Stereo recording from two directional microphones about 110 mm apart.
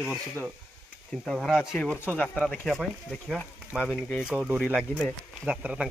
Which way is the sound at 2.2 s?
10° left (ahead or behind).